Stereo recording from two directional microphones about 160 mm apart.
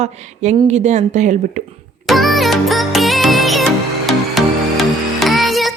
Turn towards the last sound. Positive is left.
turn(degrees=0)  # may be behind; listen again after turning